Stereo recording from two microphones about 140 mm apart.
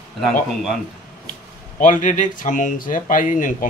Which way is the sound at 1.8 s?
65° left (ahead or behind).